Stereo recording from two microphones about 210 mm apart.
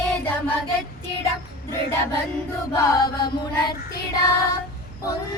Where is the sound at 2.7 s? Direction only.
15° left (ahead or behind).